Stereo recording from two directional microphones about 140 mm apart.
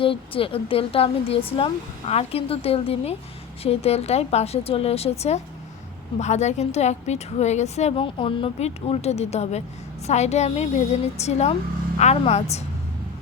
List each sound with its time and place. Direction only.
0.0 s a woman's voice: 40° left (ahead or behind)